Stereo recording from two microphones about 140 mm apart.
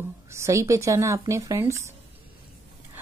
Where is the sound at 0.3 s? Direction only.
20° right (ahead or behind).